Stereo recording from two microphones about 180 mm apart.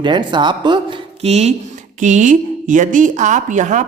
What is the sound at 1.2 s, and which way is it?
A man's voice, 40° right (ahead or behind).